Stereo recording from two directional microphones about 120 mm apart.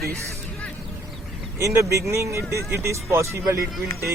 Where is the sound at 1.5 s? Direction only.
25° right (ahead or behind).